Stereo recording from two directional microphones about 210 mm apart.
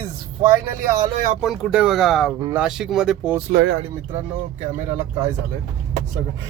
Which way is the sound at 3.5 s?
50° right (ahead or behind).